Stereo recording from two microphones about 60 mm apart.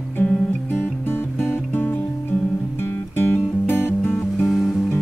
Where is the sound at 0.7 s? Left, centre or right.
Left.